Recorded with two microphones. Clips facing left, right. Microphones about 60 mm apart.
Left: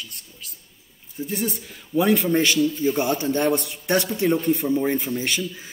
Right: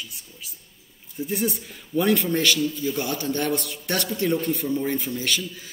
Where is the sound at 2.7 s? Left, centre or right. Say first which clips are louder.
Left 5 dB; left.